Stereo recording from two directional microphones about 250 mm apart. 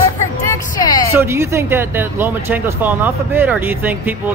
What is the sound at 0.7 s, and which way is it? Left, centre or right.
Speech, centre.